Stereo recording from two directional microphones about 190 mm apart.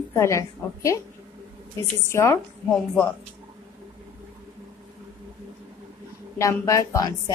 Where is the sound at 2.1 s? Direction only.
15° left (ahead or behind).